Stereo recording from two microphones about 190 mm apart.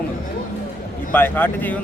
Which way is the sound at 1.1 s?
10° left (ahead or behind).